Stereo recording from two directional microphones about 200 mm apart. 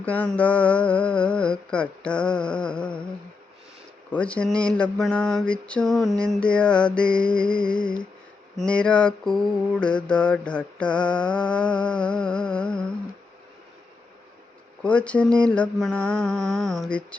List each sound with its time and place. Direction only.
0.0 s mantra: 5° left (ahead or behind)
4.1 s mantra: 5° left (ahead or behind)
14.8 s mantra: 5° left (ahead or behind)